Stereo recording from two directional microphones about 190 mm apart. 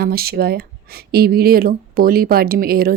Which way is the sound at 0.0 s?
55° right (ahead or behind).